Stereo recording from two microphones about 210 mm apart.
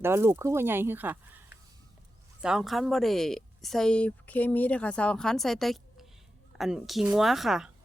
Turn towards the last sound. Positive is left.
turn(degrees=0)  # may be behind; listen again after turning